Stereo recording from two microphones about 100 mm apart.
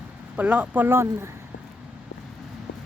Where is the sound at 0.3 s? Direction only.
15° right (ahead or behind).